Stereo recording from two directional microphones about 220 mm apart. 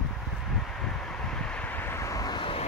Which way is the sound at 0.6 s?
5° left (ahead or behind).